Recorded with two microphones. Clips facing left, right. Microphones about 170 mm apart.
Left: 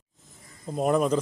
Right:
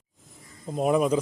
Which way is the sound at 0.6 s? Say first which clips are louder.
Right 1 dB; 5° right (ahead or behind).